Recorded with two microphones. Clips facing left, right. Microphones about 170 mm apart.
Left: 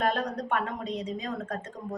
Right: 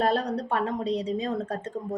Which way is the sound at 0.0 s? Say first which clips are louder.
Right 3 dB; 35° right (ahead or behind).